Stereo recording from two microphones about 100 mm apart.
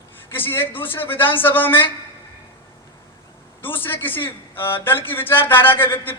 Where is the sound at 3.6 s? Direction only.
20° left (ahead or behind).